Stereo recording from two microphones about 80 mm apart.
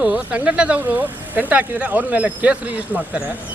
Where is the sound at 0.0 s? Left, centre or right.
Centre.